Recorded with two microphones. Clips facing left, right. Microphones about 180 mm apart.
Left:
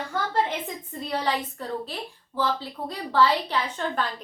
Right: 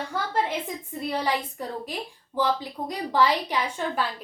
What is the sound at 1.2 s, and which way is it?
A woman's voice, 15° right (ahead or behind).